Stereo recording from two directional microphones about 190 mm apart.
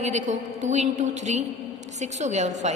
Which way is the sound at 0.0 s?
35° right (ahead or behind).